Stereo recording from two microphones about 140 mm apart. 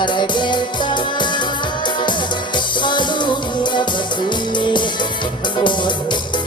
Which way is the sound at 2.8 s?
35° left (ahead or behind).